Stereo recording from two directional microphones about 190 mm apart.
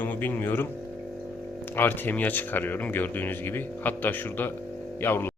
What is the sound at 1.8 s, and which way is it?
Speech, 10° left (ahead or behind).